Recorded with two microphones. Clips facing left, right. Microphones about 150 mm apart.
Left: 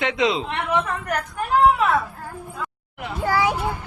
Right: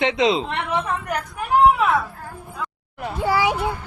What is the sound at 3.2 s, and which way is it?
Speech, 10° right (ahead or behind).